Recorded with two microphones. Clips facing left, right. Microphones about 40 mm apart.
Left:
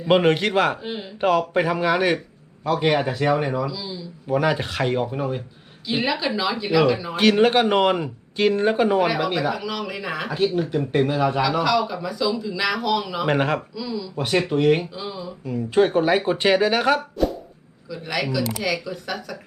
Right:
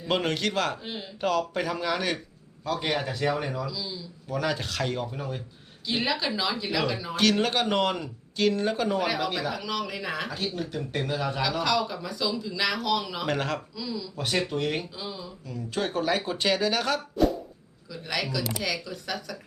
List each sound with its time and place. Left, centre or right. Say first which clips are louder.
0.1 s speech: left 9 dB; left
0.8 s speech: left 6 dB; centre
1.2 s speech: left 7 dB; left
7.2 s speech: left 7 dB; left
9.0 s speech: left 6 dB; centre
10.3 s speech: left 10 dB; centre
13.2 s speech: left 7 dB; left
13.7 s speech: left 6 dB; centre
15.4 s speech: left 12 dB; left
17.8 s speech: left 5 dB; centre